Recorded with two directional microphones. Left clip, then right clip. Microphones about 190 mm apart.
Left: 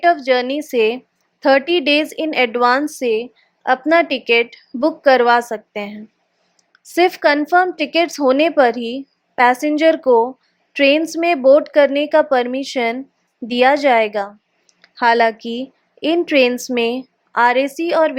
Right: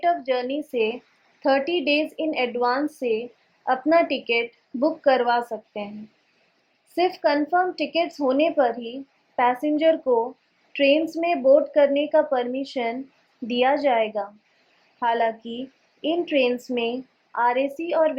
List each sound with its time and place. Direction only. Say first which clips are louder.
0.0 s a woman's voice: left 8 dB; 35° left (ahead or behind)
6.9 s a woman's voice: left 7 dB; 35° left (ahead or behind)